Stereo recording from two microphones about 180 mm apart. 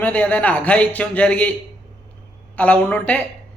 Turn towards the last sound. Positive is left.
turn(degrees=5)  # may be behind; listen again after turning